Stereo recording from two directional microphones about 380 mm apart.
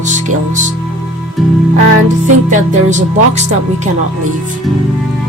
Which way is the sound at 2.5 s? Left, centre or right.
Centre.